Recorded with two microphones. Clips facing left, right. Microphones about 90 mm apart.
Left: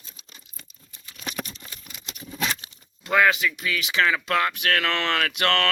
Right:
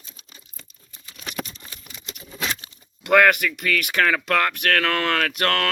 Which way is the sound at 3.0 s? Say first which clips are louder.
Right 4 dB; 60° right (ahead or behind).